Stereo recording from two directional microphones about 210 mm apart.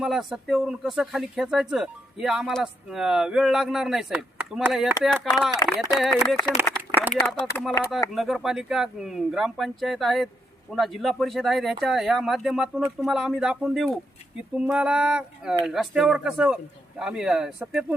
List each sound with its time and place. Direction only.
0.0 s speech: centre (ahead or behind)
5.6 s speech: 15° left (ahead or behind)
6.0 s speech: centre (ahead or behind)
6.7 s a sound: 10° left (ahead or behind)
7.0 s speech: centre (ahead or behind)